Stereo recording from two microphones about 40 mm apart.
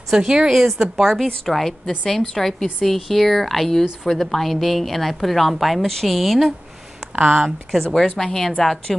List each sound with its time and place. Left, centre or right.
0.1 s a woman's voice: centre
1.2 s a woman's voice: centre
7.2 s speech: right
7.8 s a woman's voice: centre